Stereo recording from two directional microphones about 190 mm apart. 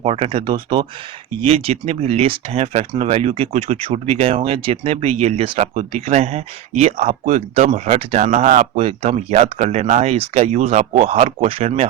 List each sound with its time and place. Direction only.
0.0 s speech: 30° right (ahead or behind)